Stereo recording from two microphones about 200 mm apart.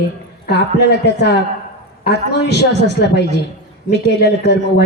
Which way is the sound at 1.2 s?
55° left (ahead or behind).